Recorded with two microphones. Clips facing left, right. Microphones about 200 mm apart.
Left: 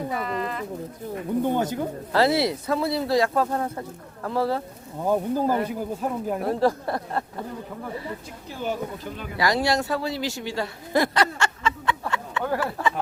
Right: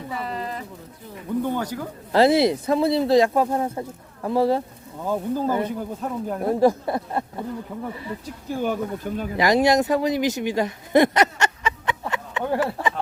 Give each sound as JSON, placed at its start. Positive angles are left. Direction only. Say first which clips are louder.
{"t": 0.2, "sound": "a sound", "louder": "left 1 dB", "side_deg": -35}
{"t": 1.4, "sound": "speech", "louder": "left 2 dB", "side_deg": 20}
{"t": 2.1, "sound": "speech", "louder": "right 5 dB", "side_deg": -20}
{"t": 5.0, "sound": "speech", "louder": "left 1 dB", "side_deg": 15}
{"t": 6.5, "sound": "speech", "louder": "right 5 dB", "side_deg": -15}
{"t": 8.4, "sound": "speech", "louder": "right 4 dB", "side_deg": -50}
{"t": 9.4, "sound": "speech", "louder": "right 5 dB", "side_deg": -20}